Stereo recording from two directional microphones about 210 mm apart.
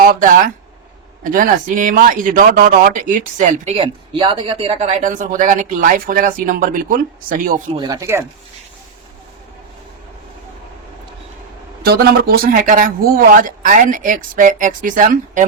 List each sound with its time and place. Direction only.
0.0 s speech: 40° right (ahead or behind)
7.7 s speech: 20° right (ahead or behind)
11.8 s speech: 45° right (ahead or behind)